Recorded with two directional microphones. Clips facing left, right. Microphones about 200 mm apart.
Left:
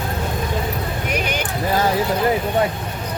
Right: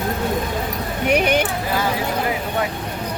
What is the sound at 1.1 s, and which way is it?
Speech, 60° right (ahead or behind).